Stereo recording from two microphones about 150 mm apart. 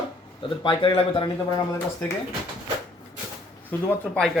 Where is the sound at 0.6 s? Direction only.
35° left (ahead or behind).